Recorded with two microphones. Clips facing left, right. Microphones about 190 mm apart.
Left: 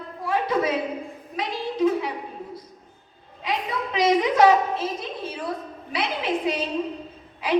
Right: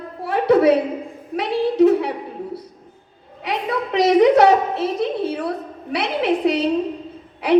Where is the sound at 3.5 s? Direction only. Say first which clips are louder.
Right 5 dB; 65° right (ahead or behind).